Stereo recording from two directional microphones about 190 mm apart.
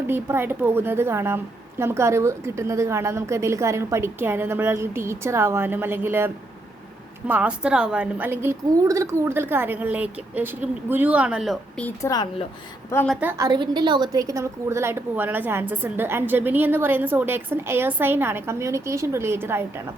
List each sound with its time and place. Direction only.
0.1 s a woman's voice: 10° right (ahead or behind)
11.9 s speech: 20° left (ahead or behind)
12.9 s a woman's voice: 10° left (ahead or behind)
13.1 s a woman's voice: 15° right (ahead or behind)